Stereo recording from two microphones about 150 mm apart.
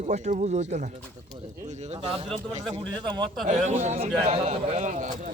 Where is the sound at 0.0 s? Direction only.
50° right (ahead or behind).